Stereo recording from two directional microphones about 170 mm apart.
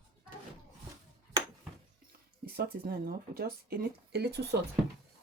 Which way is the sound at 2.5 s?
65° right (ahead or behind).